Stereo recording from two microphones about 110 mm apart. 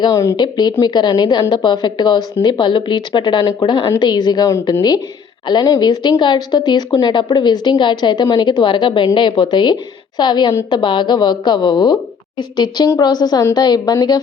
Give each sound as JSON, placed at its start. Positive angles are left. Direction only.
{"t": 0.0, "sound": "a woman's voice", "side_deg": 30}
{"t": 0.3, "sound": "a woman's voice", "side_deg": 40}